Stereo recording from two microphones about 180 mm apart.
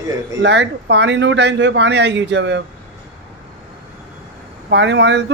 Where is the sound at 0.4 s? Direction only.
85° right.